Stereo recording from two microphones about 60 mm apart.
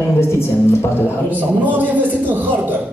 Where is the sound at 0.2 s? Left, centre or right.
Left.